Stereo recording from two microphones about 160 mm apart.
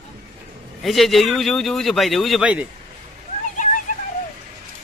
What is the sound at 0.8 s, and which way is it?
Speech, centre (ahead or behind).